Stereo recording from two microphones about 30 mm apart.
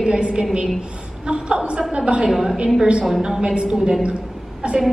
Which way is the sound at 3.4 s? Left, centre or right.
Right.